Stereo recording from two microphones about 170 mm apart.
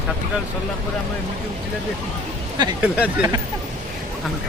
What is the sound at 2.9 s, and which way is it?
Speech, 10° right (ahead or behind).